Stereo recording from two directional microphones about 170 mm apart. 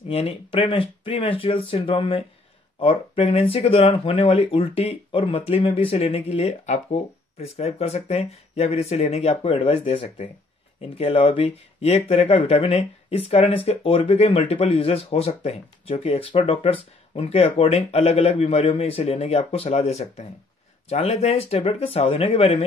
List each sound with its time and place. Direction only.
0.1 s speech: 35° left (ahead or behind)